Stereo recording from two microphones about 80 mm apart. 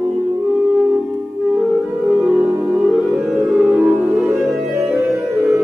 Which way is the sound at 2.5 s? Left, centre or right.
Right.